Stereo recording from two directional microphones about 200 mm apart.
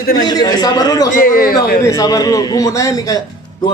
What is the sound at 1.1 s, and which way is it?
Speech, 45° left (ahead or behind).